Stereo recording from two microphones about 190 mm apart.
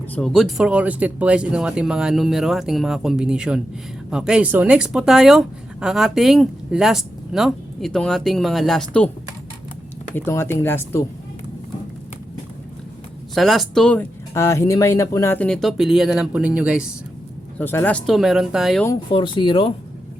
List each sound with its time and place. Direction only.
0.1 s speech: centre (ahead or behind)
10.2 s speech: 15° left (ahead or behind)
13.3 s speech: centre (ahead or behind)
17.6 s speech: 10° left (ahead or behind)
19.1 s speech: 25° left (ahead or behind)